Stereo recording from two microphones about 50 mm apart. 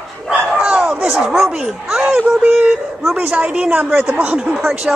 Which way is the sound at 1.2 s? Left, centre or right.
Centre.